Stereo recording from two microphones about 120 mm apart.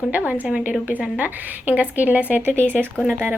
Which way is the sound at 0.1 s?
15° right (ahead or behind).